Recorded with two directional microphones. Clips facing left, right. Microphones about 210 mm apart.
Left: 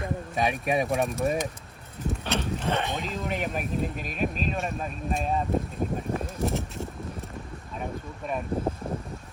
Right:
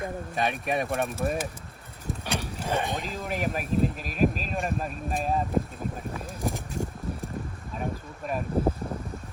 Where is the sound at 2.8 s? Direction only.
Centre (ahead or behind).